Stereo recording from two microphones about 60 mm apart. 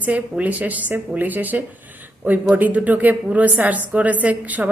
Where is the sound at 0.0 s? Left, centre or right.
Right.